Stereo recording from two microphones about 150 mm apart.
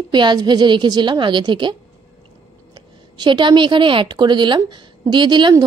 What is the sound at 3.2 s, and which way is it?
A woman's voice, 30° right (ahead or behind).